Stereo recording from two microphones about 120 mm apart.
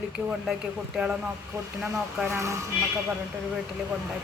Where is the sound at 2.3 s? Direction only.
25° right (ahead or behind).